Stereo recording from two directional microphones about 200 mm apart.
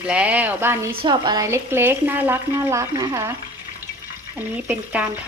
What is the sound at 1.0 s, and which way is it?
Speech, 20° right (ahead or behind).